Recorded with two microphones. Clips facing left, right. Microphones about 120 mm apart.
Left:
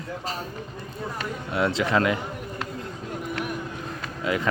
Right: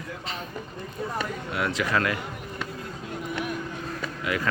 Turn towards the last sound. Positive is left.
turn(degrees=25)  # may be behind; listen again after turning